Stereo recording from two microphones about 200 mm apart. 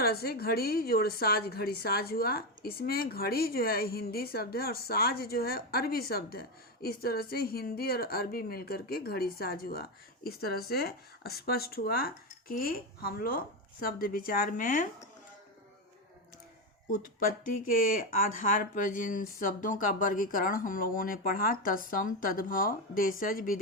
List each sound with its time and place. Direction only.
0.0 s a woman's voice: 50° left (ahead or behind)
16.9 s a woman's voice: 45° left (ahead or behind)